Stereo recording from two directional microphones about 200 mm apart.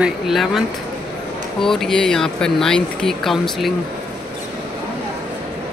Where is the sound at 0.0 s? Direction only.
Centre (ahead or behind).